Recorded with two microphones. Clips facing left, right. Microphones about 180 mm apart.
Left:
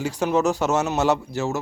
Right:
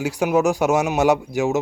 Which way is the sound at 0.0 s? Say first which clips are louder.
Right 3 dB; 10° right (ahead or behind).